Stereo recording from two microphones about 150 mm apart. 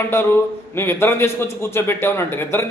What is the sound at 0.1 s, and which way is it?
A man's voice, 15° left (ahead or behind).